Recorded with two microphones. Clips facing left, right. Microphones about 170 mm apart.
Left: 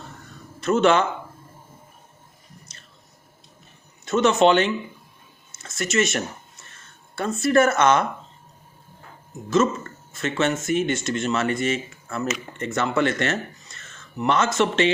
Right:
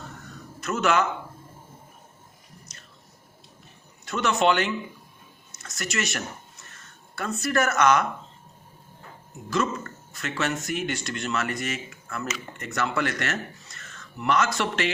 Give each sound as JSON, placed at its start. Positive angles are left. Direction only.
{"t": 0.6, "sound": "speech", "side_deg": 30}
{"t": 4.0, "sound": "speech", "side_deg": 25}
{"t": 10.1, "sound": "speech", "side_deg": 25}